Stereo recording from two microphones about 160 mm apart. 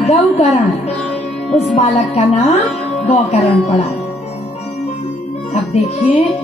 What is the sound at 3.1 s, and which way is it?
Speech, 40° left (ahead or behind).